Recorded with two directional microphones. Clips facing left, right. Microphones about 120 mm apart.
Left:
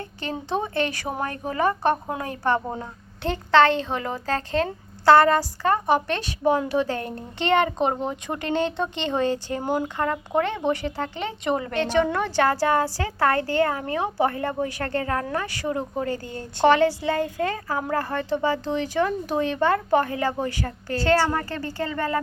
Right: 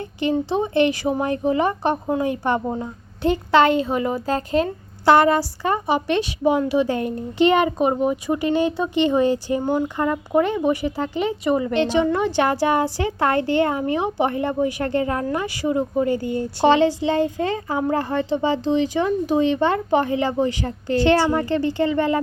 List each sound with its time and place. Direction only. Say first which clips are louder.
0.0 s a woman's voice: right 10 dB; 15° right (ahead or behind)
2.6 s a woman's voice: right 5 dB; 5° right (ahead or behind)
9.6 s speech: right 2 dB; 10° left (ahead or behind)
10.0 s a woman's voice: right 4 dB; 15° right (ahead or behind)
11.7 s a woman's voice: right 3 dB; 15° right (ahead or behind)